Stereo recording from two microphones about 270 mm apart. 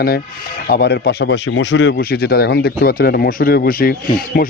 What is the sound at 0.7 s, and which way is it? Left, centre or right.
Speech, left.